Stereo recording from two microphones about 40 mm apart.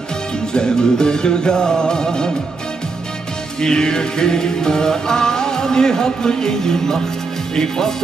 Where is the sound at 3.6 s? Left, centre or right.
Centre.